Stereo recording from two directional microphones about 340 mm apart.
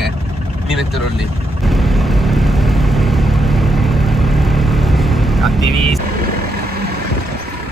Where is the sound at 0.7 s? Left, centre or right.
Centre.